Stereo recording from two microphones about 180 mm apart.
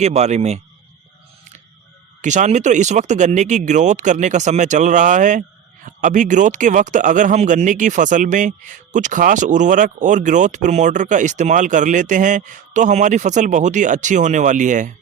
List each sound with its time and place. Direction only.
0.0 s speech: 40° right (ahead or behind)
2.2 s speech: 40° right (ahead or behind)